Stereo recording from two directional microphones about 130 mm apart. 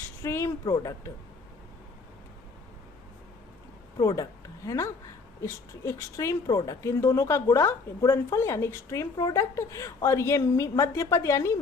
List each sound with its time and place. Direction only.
0.2 s a woman's voice: 20° left (ahead or behind)
3.9 s a woman's voice: 30° left (ahead or behind)